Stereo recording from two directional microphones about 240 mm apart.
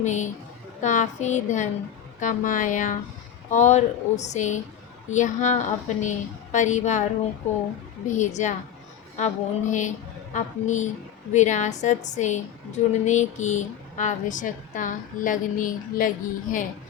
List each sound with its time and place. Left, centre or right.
0.0 s a woman's voice: left
8.0 s a woman's voice: left